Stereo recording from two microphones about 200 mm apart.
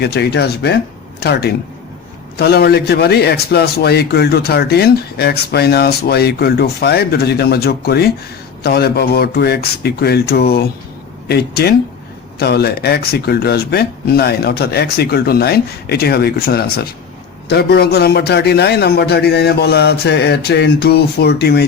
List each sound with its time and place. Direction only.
0.0 s a man's voice: 55° left (ahead or behind)